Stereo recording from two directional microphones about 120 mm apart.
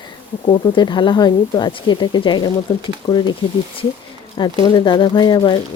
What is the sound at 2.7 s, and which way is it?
Speech, 30° left (ahead or behind).